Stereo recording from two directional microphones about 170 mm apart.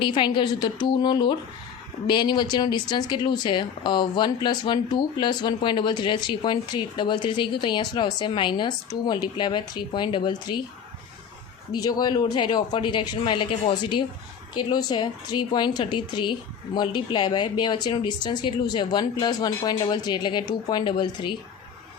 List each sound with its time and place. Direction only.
0.0 s speech: 30° left (ahead or behind)
11.8 s speech: 25° left (ahead or behind)